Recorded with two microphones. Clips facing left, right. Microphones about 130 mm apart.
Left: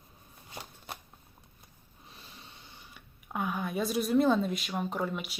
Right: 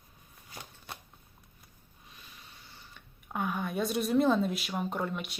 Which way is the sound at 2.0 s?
30° left (ahead or behind).